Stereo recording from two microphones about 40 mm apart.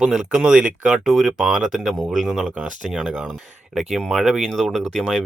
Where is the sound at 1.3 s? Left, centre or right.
Centre.